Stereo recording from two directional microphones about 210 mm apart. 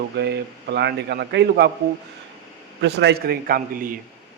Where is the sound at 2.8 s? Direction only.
55° right (ahead or behind).